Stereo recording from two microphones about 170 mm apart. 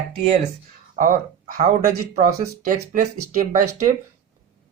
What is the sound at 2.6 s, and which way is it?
Speech, 50° right (ahead or behind).